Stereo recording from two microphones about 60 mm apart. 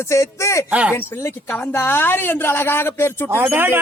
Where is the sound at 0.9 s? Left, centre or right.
Left.